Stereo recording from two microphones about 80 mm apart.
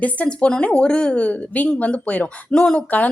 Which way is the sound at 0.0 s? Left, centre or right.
Centre.